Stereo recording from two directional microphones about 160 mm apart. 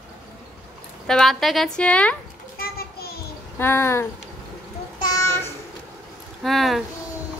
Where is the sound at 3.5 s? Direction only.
15° left (ahead or behind).